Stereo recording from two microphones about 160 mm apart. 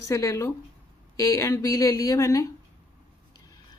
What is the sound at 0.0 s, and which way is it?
Speech, 20° left (ahead or behind).